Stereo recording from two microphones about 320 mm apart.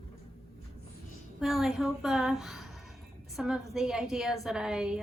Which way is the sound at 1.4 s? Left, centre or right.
Centre.